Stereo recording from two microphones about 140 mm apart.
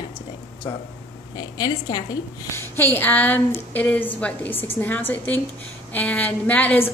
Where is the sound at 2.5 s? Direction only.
15° left (ahead or behind).